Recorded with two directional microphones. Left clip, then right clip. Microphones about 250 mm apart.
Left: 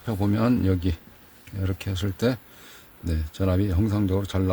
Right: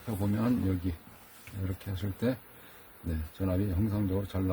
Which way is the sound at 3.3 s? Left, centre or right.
Left.